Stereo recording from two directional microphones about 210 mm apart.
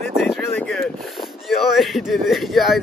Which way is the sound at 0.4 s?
10° left (ahead or behind).